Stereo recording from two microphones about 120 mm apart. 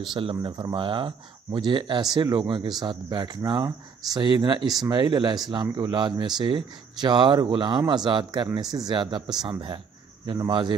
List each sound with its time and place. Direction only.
0.1 s speech: 45° right (ahead or behind)